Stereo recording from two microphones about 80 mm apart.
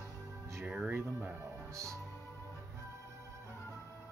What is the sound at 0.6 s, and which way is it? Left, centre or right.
Speech, centre.